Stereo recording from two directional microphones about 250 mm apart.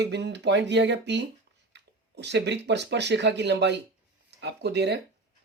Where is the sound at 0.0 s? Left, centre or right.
Right.